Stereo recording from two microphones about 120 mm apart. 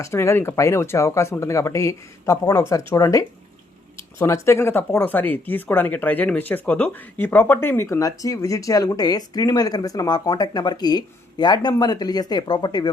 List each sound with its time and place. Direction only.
0.0 s speech: 20° left (ahead or behind)